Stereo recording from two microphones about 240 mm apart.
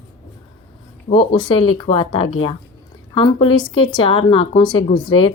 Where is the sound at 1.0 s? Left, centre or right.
Left.